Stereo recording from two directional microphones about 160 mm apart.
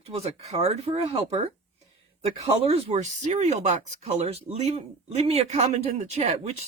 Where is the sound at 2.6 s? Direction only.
40° right (ahead or behind).